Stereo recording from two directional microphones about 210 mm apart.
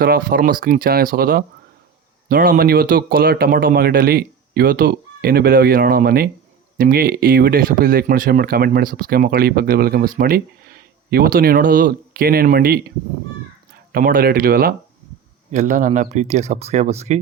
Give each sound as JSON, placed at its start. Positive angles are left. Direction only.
{"t": 0.0, "sound": "speech", "side_deg": -45}
{"t": 13.9, "sound": "speech", "side_deg": -45}